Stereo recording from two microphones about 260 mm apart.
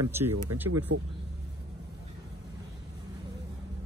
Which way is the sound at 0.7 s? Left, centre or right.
Right.